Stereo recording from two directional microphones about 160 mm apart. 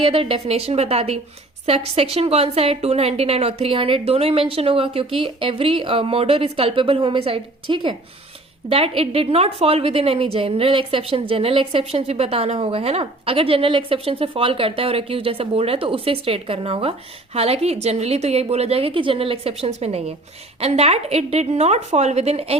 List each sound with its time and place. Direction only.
0.0 s a woman's voice: 35° right (ahead or behind)